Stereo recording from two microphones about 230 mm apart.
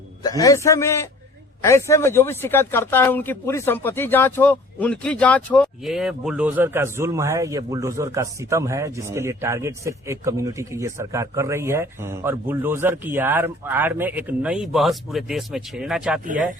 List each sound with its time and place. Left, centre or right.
0.2 s a man's voice: centre
16.2 s speech: right